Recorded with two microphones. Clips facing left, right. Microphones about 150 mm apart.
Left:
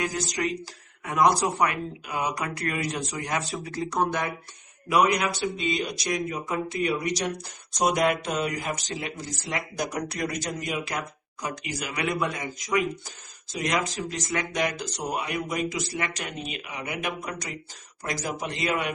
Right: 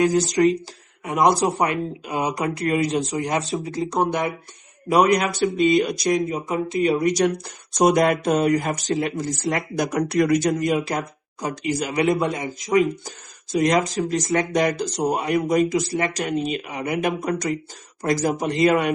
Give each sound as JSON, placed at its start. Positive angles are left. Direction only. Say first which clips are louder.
{"t": 0.0, "sound": "speech", "louder": "right 11 dB", "side_deg": -30}
{"t": 4.9, "sound": "speech", "louder": "right 5 dB", "side_deg": -35}
{"t": 6.1, "sound": "speech", "louder": "right 7 dB", "side_deg": -30}
{"t": 7.0, "sound": "speech", "louder": "right 9 dB", "side_deg": -50}
{"t": 10.7, "sound": "speech", "louder": "right 8 dB", "side_deg": -30}
{"t": 13.1, "sound": "speech", "louder": "right 12 dB", "side_deg": -40}